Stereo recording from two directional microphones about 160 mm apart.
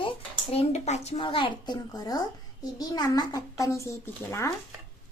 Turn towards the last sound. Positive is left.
turn(degrees=20)  # may be behind; listen again after turning